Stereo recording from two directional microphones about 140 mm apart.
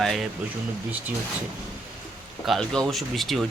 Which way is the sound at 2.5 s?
5° left (ahead or behind).